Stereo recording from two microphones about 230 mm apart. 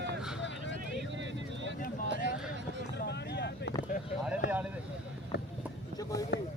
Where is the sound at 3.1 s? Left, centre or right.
Left.